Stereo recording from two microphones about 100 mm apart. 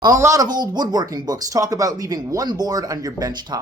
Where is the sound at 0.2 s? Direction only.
30° right (ahead or behind).